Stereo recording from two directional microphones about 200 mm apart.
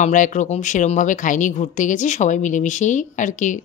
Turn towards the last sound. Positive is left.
turn(degrees=40)  # may be behind; listen again after turning